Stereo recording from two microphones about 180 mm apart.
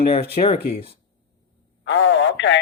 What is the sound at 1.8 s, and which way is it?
Radio, 90° left.